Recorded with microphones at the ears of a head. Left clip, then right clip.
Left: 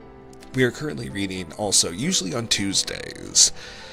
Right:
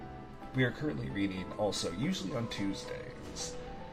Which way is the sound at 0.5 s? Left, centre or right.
Left.